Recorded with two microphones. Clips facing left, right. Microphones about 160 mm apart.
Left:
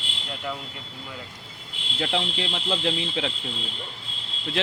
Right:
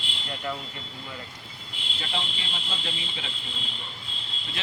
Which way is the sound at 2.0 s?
70° left (ahead or behind).